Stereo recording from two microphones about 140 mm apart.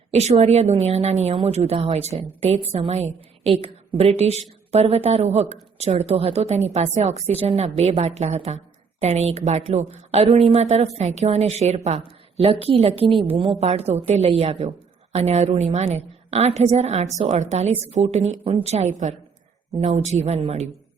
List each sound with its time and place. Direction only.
0.1 s speech: 50° right (ahead or behind)